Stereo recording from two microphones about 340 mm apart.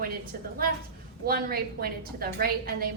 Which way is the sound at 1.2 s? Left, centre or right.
Right.